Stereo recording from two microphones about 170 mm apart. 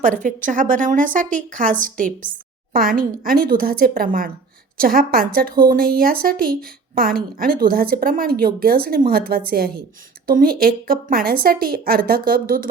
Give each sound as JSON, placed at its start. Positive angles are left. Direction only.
{"t": 0.0, "sound": "a woman's voice", "side_deg": -50}